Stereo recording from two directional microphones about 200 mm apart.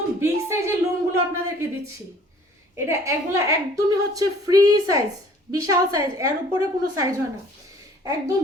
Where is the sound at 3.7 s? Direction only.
15° right (ahead or behind).